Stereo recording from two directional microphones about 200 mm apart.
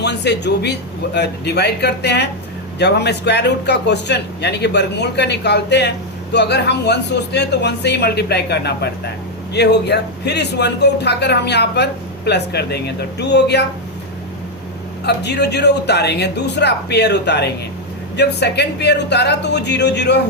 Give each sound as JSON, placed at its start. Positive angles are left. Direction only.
{"t": 0.0, "sound": "a man's voice", "side_deg": 60}
{"t": 15.0, "sound": "a man's voice", "side_deg": 55}